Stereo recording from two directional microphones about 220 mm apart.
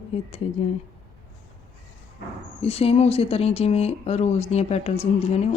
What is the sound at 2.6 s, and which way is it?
Speech, 25° left (ahead or behind).